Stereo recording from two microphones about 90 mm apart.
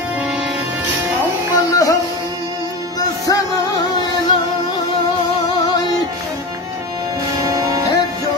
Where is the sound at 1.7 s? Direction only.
40° left (ahead or behind).